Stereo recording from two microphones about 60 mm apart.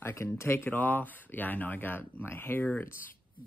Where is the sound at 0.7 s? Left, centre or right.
Left.